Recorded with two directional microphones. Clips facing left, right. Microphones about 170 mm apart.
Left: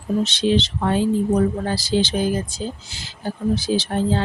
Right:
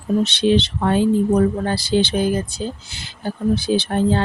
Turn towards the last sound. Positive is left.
turn(degrees=-60)  # may be behind; listen again after turning